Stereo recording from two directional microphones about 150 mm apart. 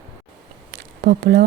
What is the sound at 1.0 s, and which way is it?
Speech, 90° right.